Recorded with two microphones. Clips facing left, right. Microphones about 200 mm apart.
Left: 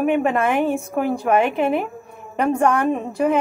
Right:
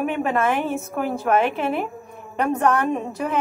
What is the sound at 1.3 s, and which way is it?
A woman's voice, 10° left (ahead or behind).